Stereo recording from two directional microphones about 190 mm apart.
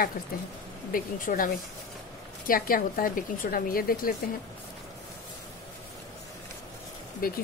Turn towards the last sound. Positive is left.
turn(degrees=50)  # may be behind; listen again after turning